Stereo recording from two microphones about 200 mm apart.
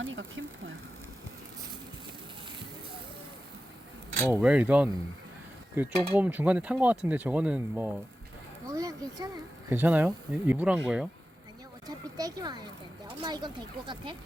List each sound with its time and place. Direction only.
0.0 s speech: 75° right (ahead or behind)
4.3 s speech: 5° right (ahead or behind)
11.9 s speech: 20° right (ahead or behind)